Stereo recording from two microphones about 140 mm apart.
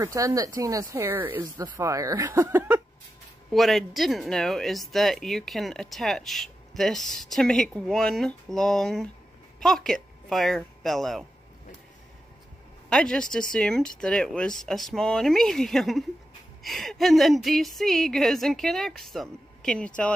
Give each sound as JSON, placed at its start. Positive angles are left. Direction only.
{"t": 0.0, "sound": "speech", "side_deg": -25}
{"t": 3.5, "sound": "speech", "side_deg": 0}
{"t": 12.9, "sound": "speech", "side_deg": 5}